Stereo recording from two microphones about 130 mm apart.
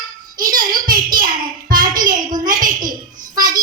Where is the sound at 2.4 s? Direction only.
90° right.